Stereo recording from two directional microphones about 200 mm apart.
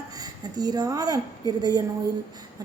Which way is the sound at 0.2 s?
20° right (ahead or behind).